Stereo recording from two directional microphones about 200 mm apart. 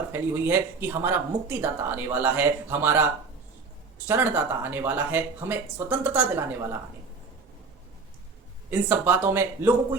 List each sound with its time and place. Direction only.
0.1 s speech: 10° right (ahead or behind)
8.7 s speech: 10° right (ahead or behind)